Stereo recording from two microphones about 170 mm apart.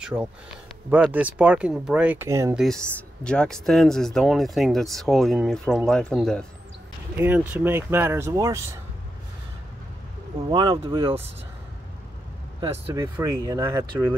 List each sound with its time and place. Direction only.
0.0 s speech: 5° right (ahead or behind)
2.5 s speech: centre (ahead or behind)
7.2 s speech: 10° right (ahead or behind)
10.5 s speech: 30° right (ahead or behind)
12.5 s speech: 20° right (ahead or behind)